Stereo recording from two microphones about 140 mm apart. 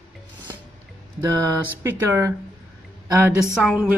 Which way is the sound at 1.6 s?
15° right (ahead or behind).